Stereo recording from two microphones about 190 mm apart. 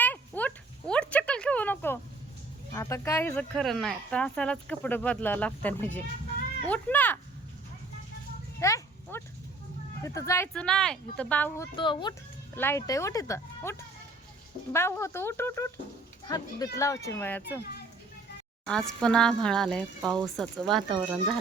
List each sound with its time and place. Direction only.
0.0 s a sound: 10° left (ahead or behind)
2.7 s speech: 15° left (ahead or behind)
8.5 s a sound: 15° left (ahead or behind)
10.0 s speech: 15° left (ahead or behind)
10.5 s speech: 5° left (ahead or behind)
11.8 s a child's voice: 25° left (ahead or behind)
12.5 s speech: 15° left (ahead or behind)
18.6 s speech: 5° left (ahead or behind)